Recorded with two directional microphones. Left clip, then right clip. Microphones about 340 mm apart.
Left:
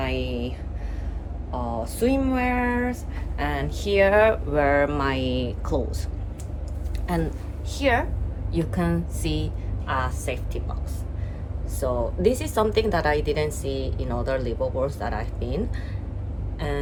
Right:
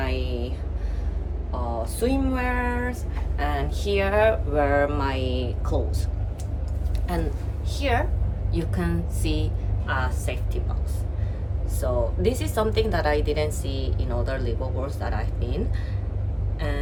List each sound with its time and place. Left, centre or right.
0.0 s a sound: left
1.8 s speech: left
7.1 s speech: centre
11.8 s speech: centre
16.6 s vehicle: centre